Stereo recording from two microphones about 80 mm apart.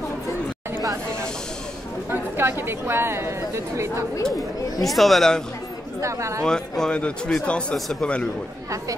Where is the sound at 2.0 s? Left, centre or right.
Right.